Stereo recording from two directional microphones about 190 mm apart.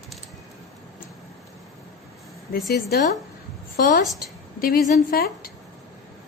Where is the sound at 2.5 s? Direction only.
55° left (ahead or behind).